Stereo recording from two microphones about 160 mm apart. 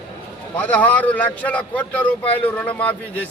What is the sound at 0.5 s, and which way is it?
A man's voice, 10° left (ahead or behind).